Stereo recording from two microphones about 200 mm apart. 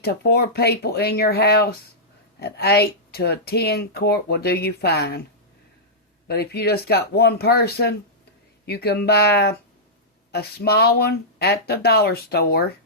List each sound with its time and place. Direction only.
0.0 s speech: 50° left (ahead or behind)
6.2 s speech: 50° left (ahead or behind)